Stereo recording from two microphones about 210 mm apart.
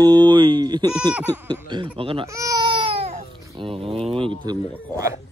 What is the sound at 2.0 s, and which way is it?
Speech, 25° right (ahead or behind).